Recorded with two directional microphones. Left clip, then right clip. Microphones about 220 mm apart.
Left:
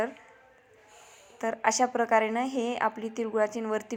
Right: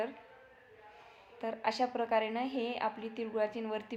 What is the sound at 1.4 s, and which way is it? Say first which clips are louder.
A woman's voice: left 7 dB; 30° left (ahead or behind).